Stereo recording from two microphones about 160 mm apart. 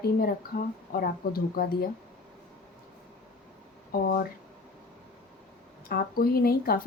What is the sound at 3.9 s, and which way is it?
Speech, 70° left (ahead or behind).